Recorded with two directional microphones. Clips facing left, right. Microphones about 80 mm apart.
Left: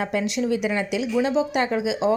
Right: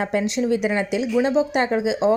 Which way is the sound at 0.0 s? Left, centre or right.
Right.